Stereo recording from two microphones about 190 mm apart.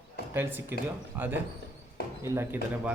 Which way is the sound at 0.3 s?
10° right (ahead or behind).